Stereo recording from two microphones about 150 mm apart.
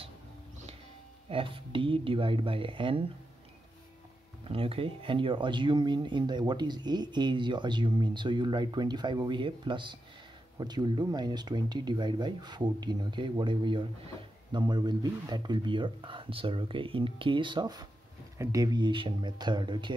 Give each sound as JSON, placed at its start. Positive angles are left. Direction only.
{"t": 1.3, "sound": "speech", "side_deg": -35}
{"t": 4.5, "sound": "speech", "side_deg": -35}